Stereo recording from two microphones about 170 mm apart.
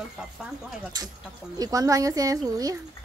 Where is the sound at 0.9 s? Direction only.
25° right (ahead or behind).